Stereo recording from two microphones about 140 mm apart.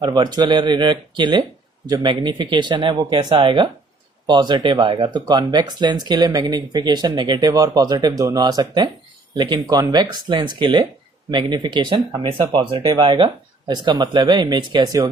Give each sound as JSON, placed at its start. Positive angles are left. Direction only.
{"t": 0.0, "sound": "speech", "side_deg": -30}